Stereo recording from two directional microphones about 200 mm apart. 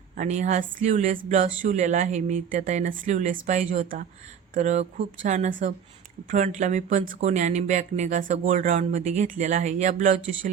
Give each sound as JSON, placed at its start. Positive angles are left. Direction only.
{"t": 0.2, "sound": "speech", "side_deg": -40}